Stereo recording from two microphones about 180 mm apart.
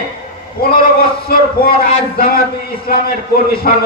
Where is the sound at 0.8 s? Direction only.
55° left (ahead or behind).